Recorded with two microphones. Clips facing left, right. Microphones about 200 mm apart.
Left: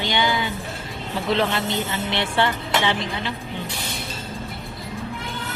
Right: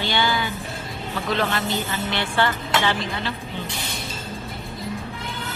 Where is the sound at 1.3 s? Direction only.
25° left (ahead or behind).